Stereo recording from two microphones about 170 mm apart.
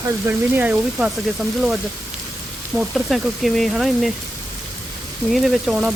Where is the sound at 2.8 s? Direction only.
Centre (ahead or behind).